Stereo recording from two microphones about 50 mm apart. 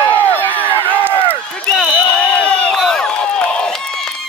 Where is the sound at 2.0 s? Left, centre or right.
Left.